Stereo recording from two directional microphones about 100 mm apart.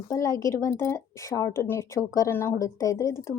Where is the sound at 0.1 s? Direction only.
30° left (ahead or behind).